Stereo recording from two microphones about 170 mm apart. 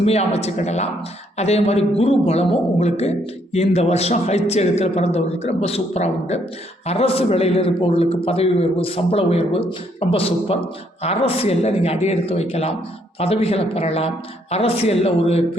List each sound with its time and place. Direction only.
0.0 s speech: 35° left (ahead or behind)